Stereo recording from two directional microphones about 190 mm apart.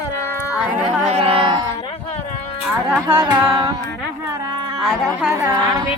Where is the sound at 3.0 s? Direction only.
15° right (ahead or behind).